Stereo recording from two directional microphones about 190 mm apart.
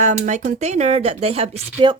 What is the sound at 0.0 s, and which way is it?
Speech, 40° right (ahead or behind).